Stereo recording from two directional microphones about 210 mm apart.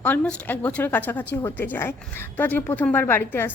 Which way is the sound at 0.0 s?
5° left (ahead or behind).